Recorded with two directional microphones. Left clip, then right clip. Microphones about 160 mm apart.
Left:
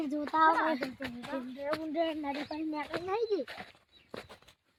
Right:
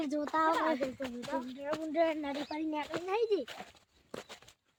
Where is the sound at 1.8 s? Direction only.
45° left (ahead or behind).